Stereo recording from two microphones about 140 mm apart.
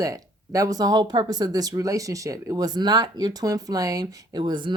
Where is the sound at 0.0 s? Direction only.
25° right (ahead or behind).